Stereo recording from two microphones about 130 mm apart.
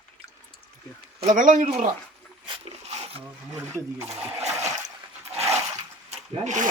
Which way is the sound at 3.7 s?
20° right (ahead or behind).